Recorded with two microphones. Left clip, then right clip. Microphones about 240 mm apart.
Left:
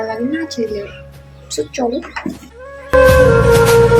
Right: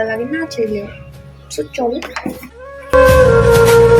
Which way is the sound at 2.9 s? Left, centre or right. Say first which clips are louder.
Right 1 dB; centre.